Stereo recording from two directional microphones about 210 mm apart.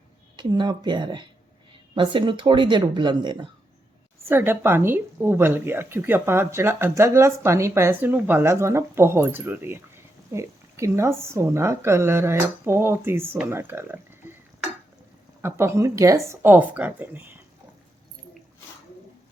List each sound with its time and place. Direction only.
0.3 s speech: 20° right (ahead or behind)
4.3 s a woman's voice: 10° right (ahead or behind)
15.4 s a woman's voice: 10° right (ahead or behind)